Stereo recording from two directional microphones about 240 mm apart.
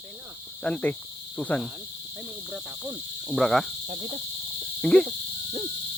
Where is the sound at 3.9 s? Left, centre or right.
Right.